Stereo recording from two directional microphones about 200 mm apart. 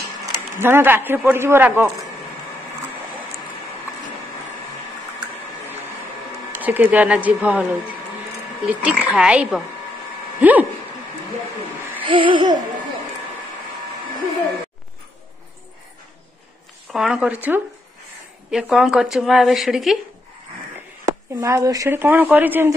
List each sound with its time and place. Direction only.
0.6 s a man's voice: 10° right (ahead or behind)
6.6 s a man's voice: 10° right (ahead or behind)
12.0 s a sound: 25° right (ahead or behind)
16.9 s a woman's voice: 5° right (ahead or behind)
21.4 s a man's voice: 15° right (ahead or behind)